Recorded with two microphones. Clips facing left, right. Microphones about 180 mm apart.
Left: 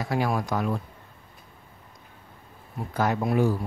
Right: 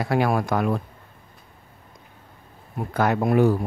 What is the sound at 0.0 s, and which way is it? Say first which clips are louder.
Speech: right 5 dB; 65° right (ahead or behind).